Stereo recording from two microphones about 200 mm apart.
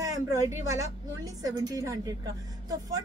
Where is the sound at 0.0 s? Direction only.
15° right (ahead or behind).